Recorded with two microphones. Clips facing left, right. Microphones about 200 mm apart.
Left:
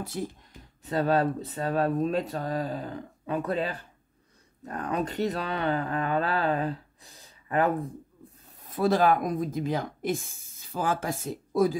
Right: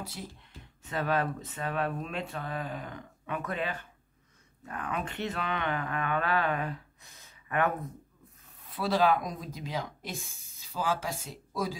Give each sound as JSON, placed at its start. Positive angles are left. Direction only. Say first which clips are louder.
{"t": 0.0, "sound": "speech", "louder": "left 8 dB", "side_deg": 50}
{"t": 0.8, "sound": "speech", "louder": "left 6 dB", "side_deg": 35}
{"t": 8.5, "sound": "speech", "louder": "left 4 dB", "side_deg": 45}